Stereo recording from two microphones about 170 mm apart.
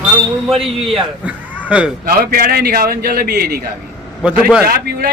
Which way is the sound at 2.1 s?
60° right (ahead or behind).